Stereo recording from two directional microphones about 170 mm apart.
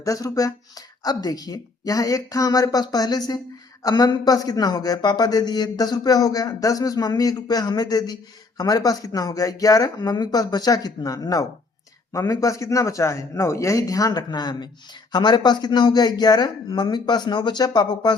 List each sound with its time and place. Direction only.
0.0 s a man's voice: 20° left (ahead or behind)